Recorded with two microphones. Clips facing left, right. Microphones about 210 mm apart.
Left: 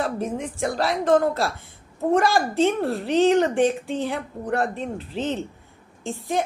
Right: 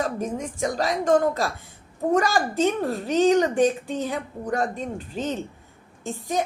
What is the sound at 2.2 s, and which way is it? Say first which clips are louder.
A woman's voice: left 2 dB; 40° right (ahead or behind).